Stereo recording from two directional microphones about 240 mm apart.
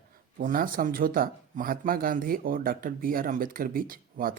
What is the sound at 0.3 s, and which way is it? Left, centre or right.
Speech, right.